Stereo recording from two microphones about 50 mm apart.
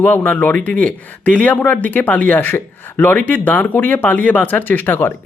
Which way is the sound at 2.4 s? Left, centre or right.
Left.